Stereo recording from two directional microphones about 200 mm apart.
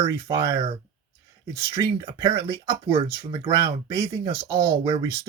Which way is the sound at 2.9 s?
25° right (ahead or behind).